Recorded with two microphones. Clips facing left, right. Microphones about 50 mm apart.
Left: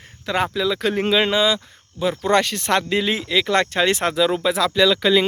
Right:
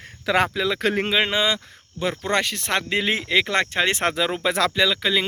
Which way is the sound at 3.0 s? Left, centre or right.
Right.